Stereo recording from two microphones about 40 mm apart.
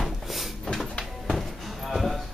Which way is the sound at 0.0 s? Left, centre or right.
Centre.